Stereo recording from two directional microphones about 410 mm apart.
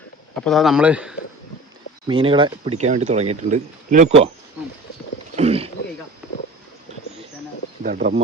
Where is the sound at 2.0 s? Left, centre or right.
Centre.